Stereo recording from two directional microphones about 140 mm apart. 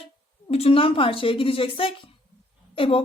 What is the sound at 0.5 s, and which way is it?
A woman's voice, 45° left (ahead or behind).